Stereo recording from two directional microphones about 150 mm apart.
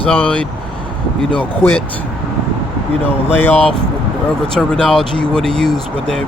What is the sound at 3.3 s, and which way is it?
Speech, 10° left (ahead or behind).